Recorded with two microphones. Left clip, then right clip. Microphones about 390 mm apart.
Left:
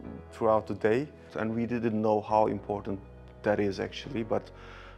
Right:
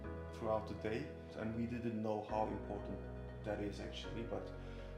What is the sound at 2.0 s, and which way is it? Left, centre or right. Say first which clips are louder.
Speech: left 15 dB; left.